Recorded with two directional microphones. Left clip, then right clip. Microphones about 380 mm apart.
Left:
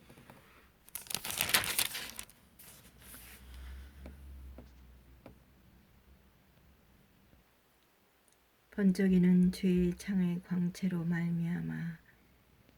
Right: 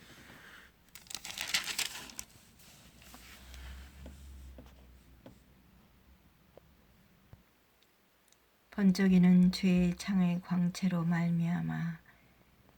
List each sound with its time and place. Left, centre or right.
0.9 s crumpling: left
8.7 s speech: centre